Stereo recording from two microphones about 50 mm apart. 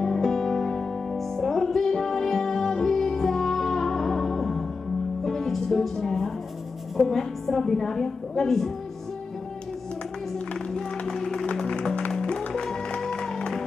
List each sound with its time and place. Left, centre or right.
0.0 s music: centre
7.0 s a woman's voice: centre
10.7 s music: centre